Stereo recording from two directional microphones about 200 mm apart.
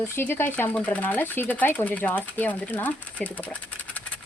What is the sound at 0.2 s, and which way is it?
Speech, 10° left (ahead or behind).